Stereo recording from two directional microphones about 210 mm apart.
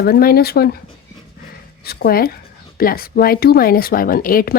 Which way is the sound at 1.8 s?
45° left (ahead or behind).